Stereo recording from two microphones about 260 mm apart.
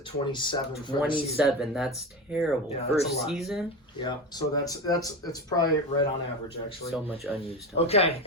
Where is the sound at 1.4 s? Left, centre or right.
Centre.